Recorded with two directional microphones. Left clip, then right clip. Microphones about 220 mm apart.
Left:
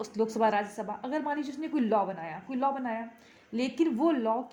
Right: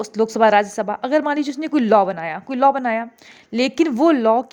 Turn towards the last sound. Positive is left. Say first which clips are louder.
# right 12 dB
turn(degrees=-45)  # may be behind; listen again after turning